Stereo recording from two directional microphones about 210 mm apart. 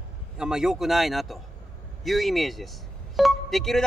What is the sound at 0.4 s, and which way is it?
Speech, 5° right (ahead or behind).